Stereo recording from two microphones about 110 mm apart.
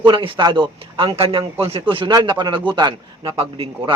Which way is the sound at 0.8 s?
60° right (ahead or behind).